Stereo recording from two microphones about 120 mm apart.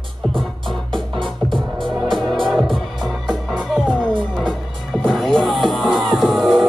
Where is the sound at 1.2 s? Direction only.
45° right (ahead or behind).